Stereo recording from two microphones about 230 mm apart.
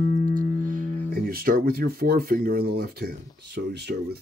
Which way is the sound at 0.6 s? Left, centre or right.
Right.